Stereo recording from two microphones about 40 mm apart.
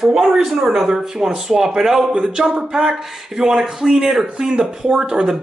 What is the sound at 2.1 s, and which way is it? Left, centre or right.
Speech, right.